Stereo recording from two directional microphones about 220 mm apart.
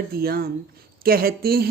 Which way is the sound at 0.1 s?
45° right (ahead or behind).